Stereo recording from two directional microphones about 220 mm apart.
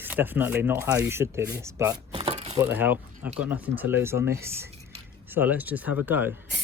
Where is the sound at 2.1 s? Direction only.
30° right (ahead or behind).